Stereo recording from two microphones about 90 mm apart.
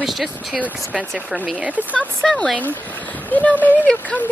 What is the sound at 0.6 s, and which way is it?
Speech, 15° right (ahead or behind).